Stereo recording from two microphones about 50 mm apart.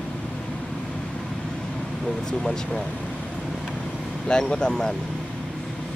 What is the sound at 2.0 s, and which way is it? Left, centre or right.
Speech, centre.